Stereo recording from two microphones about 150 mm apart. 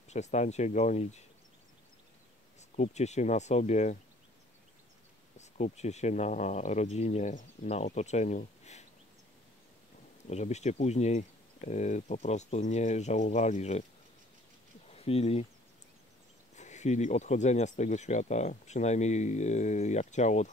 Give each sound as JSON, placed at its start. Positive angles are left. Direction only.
{"t": 0.1, "sound": "speech", "side_deg": 50}
{"t": 2.7, "sound": "speech", "side_deg": 50}
{"t": 5.4, "sound": "speech", "side_deg": 50}
{"t": 10.2, "sound": "speech", "side_deg": 50}
{"t": 14.9, "sound": "speech", "side_deg": 40}
{"t": 16.5, "sound": "speech", "side_deg": 50}